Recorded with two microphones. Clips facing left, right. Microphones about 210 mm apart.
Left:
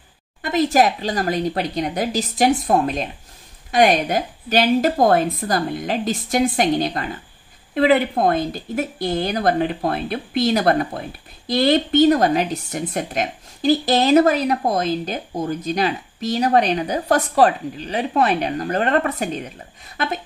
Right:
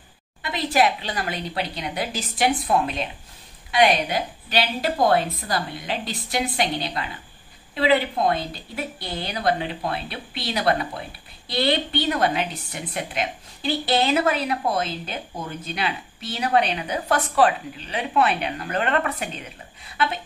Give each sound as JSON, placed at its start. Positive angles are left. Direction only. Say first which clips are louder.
{"t": 0.4, "sound": "a woman's voice", "louder": "left 5 dB", "side_deg": 45}